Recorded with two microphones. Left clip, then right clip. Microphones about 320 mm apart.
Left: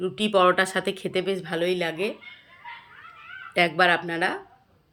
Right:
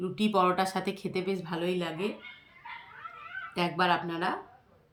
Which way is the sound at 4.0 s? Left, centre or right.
Right.